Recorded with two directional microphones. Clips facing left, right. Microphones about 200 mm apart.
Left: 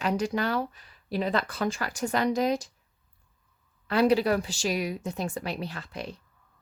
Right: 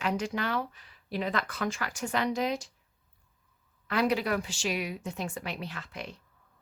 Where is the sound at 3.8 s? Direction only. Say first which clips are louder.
Left 5 dB; 30° left (ahead or behind).